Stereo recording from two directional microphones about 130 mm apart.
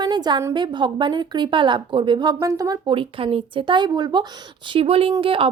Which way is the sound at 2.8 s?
40° right (ahead or behind).